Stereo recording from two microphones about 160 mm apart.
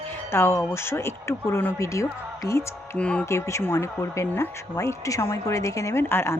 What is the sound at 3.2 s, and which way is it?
Speech, 20° left (ahead or behind).